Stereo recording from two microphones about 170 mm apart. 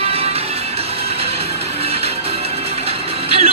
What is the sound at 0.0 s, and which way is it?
Music, 35° right (ahead or behind).